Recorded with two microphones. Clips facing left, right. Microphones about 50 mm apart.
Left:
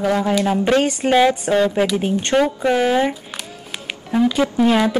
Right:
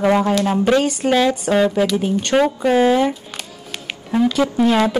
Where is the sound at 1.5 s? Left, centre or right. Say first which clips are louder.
Right 1 dB; centre.